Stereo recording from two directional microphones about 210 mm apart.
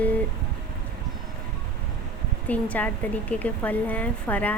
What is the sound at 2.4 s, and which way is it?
A woman's voice, 5° left (ahead or behind).